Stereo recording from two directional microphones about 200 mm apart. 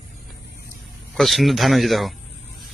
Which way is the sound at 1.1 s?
Centre (ahead or behind).